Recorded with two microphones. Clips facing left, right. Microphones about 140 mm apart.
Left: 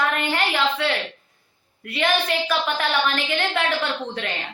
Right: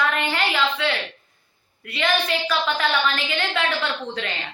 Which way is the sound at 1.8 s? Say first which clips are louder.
Left 2 dB; 50° left (ahead or behind).